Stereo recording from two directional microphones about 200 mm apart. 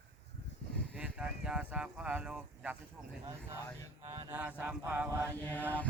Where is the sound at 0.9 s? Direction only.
5° right (ahead or behind).